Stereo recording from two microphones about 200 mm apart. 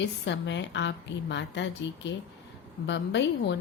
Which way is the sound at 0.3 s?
65° left (ahead or behind).